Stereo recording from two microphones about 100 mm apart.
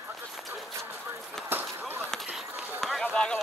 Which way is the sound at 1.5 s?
20° right (ahead or behind).